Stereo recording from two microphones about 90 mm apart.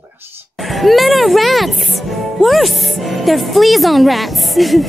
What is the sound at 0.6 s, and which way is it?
Speech, centre (ahead or behind).